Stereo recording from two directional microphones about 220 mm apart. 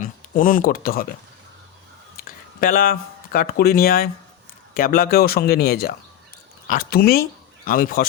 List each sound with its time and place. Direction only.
0.0 s speech: 40° left (ahead or behind)
2.6 s speech: 40° left (ahead or behind)